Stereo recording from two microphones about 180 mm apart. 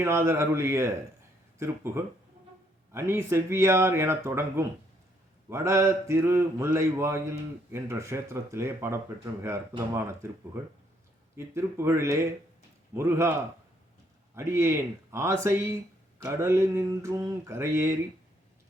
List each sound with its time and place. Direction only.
0.0 s speech: 15° right (ahead or behind)
14.3 s speech: 15° right (ahead or behind)